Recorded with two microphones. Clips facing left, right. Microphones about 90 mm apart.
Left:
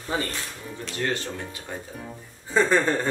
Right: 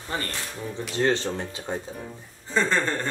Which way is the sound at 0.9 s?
25° right (ahead or behind).